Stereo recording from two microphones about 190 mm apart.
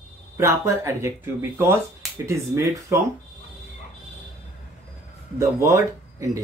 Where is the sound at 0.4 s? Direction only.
15° right (ahead or behind).